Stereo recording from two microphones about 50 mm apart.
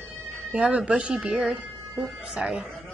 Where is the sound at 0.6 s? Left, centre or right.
Right.